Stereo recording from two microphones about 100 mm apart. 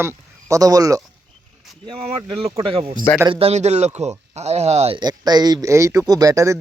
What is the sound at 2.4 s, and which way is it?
Speech, 65° right (ahead or behind).